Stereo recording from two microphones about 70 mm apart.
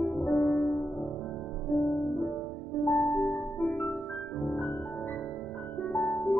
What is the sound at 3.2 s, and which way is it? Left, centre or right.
Music, centre.